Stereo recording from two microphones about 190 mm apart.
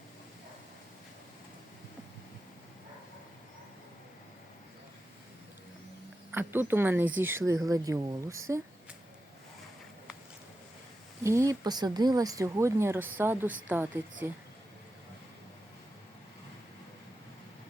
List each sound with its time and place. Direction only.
6.3 s speech: 10° right (ahead or behind)
11.2 s speech: 15° right (ahead or behind)